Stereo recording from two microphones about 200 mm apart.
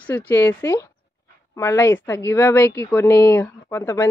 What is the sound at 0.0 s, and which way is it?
A woman's voice, 10° left (ahead or behind).